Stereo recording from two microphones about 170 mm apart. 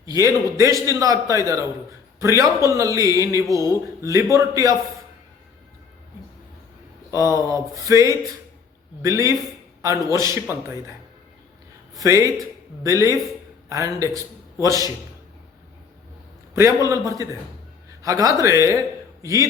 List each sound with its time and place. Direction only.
0.0 s a man's voice: 20° right (ahead or behind)
7.1 s a man's voice: 15° right (ahead or behind)
11.9 s a man's voice: 20° right (ahead or behind)
16.6 s a man's voice: 15° right (ahead or behind)
18.0 s a man's voice: 20° right (ahead or behind)